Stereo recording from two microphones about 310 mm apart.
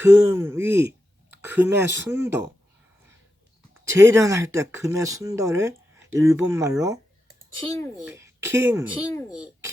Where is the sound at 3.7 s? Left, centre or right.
Centre.